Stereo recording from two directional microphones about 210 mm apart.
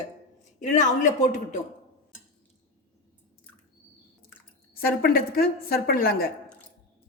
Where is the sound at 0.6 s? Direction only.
35° left (ahead or behind).